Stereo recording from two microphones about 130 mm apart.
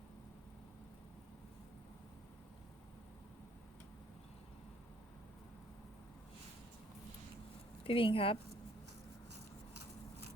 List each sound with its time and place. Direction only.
7.9 s speech: 45° left (ahead or behind)